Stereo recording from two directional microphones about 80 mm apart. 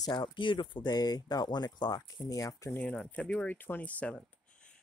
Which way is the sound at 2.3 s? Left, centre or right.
Left.